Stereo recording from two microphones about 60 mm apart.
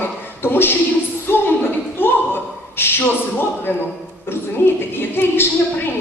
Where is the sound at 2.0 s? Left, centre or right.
Left.